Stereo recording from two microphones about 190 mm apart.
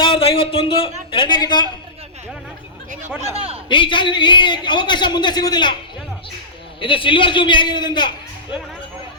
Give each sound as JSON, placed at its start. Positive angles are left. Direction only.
{"t": 0.0, "sound": "a sound", "side_deg": 30}
{"t": 3.2, "sound": "a man's voice", "side_deg": -30}
{"t": 3.7, "sound": "a man's voice", "side_deg": 25}
{"t": 6.7, "sound": "a man's voice", "side_deg": 25}